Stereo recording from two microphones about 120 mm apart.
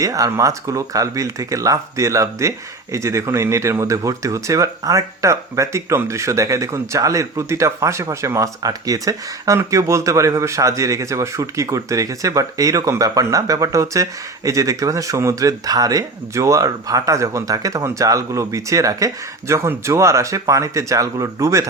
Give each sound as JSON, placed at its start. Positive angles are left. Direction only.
{"t": 0.0, "sound": "speech", "side_deg": -25}